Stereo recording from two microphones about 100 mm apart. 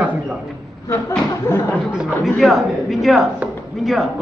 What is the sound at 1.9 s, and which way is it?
A man's voice, 5° right (ahead or behind).